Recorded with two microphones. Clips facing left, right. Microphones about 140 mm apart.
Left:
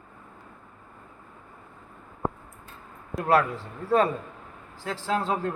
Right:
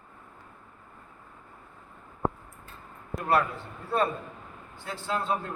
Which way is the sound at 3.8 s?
90° left.